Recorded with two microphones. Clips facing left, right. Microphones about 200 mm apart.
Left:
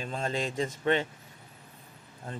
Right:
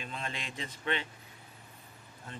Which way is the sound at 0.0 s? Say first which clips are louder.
Left 9 dB; 40° left (ahead or behind).